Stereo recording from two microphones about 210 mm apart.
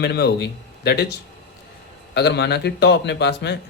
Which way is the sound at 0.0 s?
50° left (ahead or behind).